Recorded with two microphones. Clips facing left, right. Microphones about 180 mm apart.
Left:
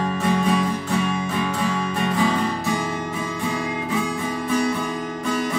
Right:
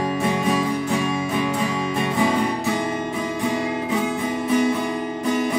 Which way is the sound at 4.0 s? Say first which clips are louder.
Right 2 dB; 25° right (ahead or behind).